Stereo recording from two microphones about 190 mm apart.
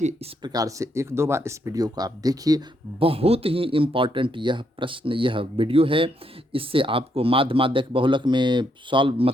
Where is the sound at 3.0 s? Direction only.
30° right (ahead or behind).